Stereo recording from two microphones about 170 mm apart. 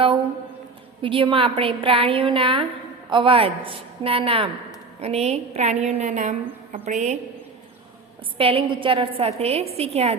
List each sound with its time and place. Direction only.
1.0 s a woman's voice: 30° right (ahead or behind)
8.4 s a woman's voice: 30° right (ahead or behind)